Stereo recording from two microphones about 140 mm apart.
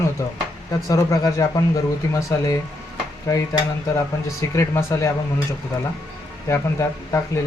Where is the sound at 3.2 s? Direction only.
25° left (ahead or behind).